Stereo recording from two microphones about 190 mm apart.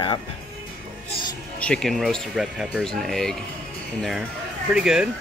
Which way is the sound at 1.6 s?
5° left (ahead or behind).